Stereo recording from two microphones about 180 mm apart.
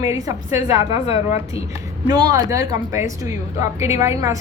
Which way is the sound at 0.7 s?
35° left (ahead or behind).